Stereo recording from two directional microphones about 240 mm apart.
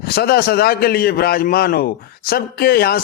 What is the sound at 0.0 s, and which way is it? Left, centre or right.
A man's voice, left.